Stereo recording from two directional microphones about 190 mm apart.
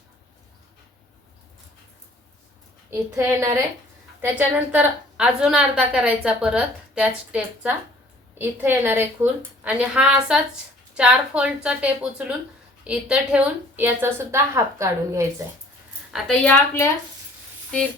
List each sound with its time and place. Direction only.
2.9 s a woman's voice: 15° right (ahead or behind)
16.1 s a woman's voice: centre (ahead or behind)